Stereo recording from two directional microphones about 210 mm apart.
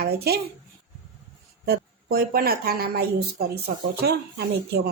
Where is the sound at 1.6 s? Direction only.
45° right (ahead or behind).